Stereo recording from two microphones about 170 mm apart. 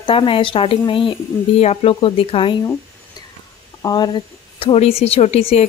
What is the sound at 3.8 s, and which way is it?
Speech, 25° left (ahead or behind).